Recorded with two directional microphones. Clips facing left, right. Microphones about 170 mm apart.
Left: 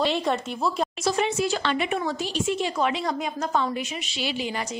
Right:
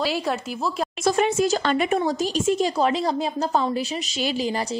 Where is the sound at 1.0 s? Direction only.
50° right (ahead or behind).